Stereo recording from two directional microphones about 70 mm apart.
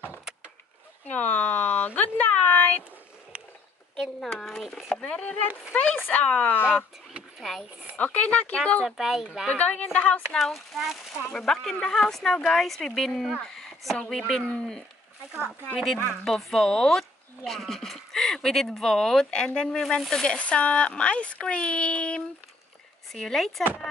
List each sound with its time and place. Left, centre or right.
1.1 s speech: left
3.9 s speech: centre
4.9 s speech: centre
7.9 s speech: centre
8.8 s speech: centre
9.5 s speech: left
10.4 s speech: centre
16.3 s speech: centre
23.1 s speech: centre